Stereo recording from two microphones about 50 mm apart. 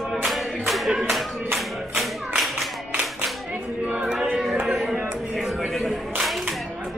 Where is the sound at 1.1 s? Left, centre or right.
Centre.